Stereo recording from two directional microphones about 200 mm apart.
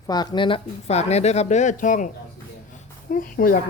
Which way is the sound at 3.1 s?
45° left (ahead or behind).